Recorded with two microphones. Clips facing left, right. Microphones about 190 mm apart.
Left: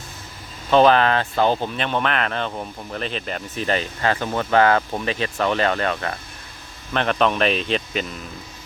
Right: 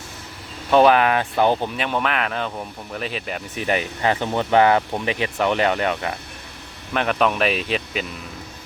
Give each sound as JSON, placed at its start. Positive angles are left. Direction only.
{"t": 0.7, "sound": "speech", "side_deg": -10}